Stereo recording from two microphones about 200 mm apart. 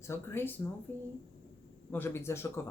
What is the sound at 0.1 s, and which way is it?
Speech, 10° left (ahead or behind).